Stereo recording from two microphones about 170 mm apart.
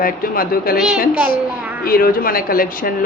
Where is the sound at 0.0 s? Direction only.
55° left (ahead or behind).